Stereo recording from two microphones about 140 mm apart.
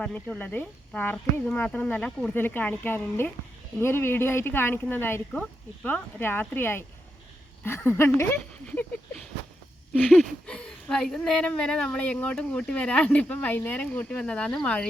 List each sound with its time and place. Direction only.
0.0 s a woman's voice: 10° left (ahead or behind)